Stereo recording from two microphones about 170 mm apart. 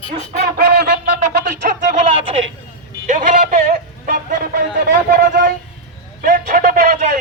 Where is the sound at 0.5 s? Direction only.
70° right (ahead or behind); by 2.0 s 50° right (ahead or behind).